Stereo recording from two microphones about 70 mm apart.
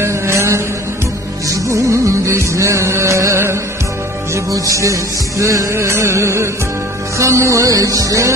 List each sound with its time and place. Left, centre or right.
0.0 s a sound: right
1.5 s music: right
4.5 s music: right